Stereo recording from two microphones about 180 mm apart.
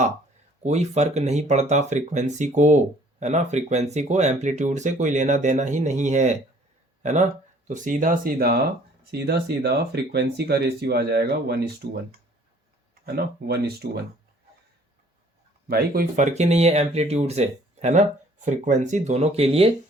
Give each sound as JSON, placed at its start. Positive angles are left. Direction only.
{"t": 0.6, "sound": "speech", "side_deg": -40}
{"t": 12.9, "sound": "speech", "side_deg": -60}
{"t": 15.7, "sound": "speech", "side_deg": -55}